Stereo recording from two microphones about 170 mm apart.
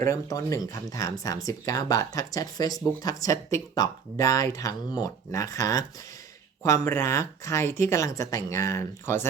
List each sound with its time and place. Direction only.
0.0 s speech: 20° left (ahead or behind)